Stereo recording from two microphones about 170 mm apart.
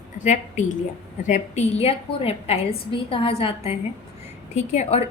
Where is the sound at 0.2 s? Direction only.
45° left (ahead or behind).